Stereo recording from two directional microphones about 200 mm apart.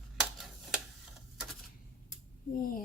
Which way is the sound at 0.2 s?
Centre (ahead or behind).